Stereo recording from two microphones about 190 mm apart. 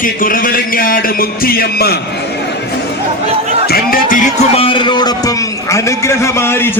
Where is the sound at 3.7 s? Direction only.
50° left (ahead or behind).